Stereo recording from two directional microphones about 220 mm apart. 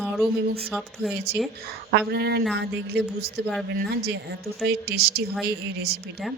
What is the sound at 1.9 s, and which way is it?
Speech, 50° right (ahead or behind).